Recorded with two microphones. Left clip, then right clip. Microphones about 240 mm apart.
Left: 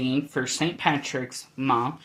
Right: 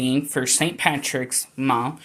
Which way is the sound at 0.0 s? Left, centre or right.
Right.